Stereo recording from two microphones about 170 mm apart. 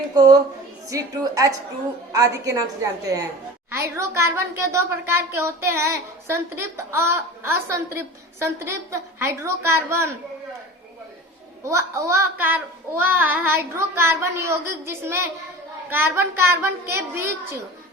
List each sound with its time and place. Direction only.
0.9 s a woman's voice: 20° right (ahead or behind)
11.6 s a woman's voice: 15° right (ahead or behind)